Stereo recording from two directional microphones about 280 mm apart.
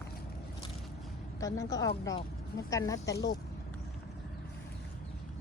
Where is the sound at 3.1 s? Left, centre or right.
Left.